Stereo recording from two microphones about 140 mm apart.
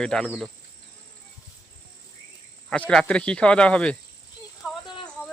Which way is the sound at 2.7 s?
10° left (ahead or behind).